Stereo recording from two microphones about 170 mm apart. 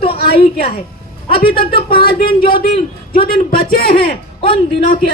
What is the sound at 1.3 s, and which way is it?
A man's voice, 60° left (ahead or behind).